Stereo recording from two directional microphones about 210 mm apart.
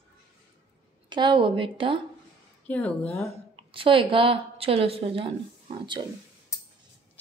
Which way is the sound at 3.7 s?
25° right (ahead or behind).